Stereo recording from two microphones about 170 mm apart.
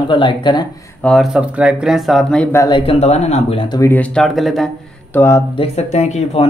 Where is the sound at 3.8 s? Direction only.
10° left (ahead or behind).